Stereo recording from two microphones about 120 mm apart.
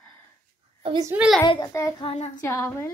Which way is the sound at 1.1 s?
5° right (ahead or behind).